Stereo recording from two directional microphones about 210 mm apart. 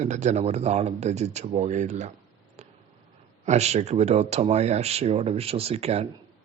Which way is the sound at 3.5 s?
30° right (ahead or behind).